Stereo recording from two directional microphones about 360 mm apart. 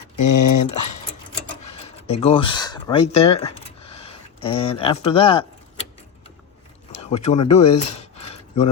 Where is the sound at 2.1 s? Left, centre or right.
Centre.